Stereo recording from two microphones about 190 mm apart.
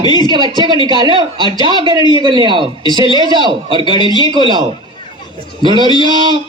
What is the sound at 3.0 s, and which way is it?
Speech, 25° left (ahead or behind).